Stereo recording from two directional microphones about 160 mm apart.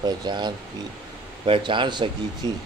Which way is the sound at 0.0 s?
30° right (ahead or behind).